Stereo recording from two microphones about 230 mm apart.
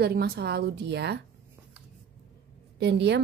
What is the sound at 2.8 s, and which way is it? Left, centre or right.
Speech, right.